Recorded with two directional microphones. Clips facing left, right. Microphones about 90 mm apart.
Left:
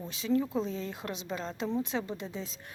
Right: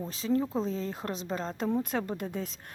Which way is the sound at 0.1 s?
40° right (ahead or behind).